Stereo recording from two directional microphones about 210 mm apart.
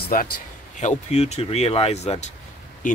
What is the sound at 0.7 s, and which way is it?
Speech, 30° left (ahead or behind).